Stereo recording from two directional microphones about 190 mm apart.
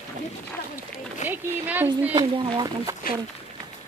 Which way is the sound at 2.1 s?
25° right (ahead or behind).